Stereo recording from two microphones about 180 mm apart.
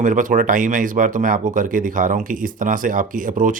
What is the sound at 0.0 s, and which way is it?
Speech, 45° right (ahead or behind).